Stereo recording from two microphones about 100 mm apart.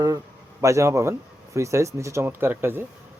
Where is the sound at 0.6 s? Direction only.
30° right (ahead or behind).